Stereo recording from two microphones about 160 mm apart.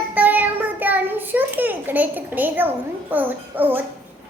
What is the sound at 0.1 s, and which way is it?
Child singing, 10° right (ahead or behind).